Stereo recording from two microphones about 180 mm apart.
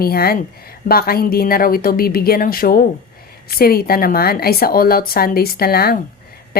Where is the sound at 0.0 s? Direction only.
55° left (ahead or behind).